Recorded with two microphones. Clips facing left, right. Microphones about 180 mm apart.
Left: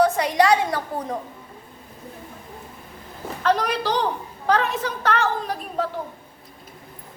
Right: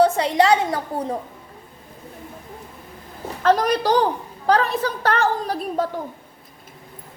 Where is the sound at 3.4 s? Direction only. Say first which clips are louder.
Right 4 dB; 40° right (ahead or behind).